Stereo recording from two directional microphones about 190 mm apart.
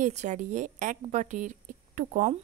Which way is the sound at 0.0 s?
40° right (ahead or behind).